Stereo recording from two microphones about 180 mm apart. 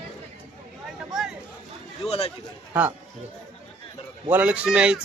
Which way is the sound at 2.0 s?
35° left (ahead or behind).